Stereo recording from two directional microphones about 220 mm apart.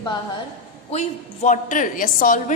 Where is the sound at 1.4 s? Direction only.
35° left (ahead or behind).